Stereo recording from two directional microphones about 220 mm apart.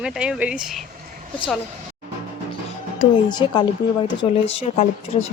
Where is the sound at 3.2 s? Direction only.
20° left (ahead or behind).